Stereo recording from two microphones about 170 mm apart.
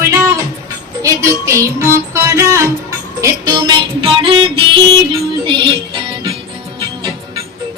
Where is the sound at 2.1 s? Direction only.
15° right (ahead or behind).